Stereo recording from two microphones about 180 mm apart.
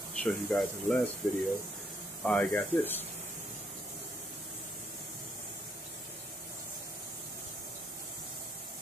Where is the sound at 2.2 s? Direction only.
5° left (ahead or behind).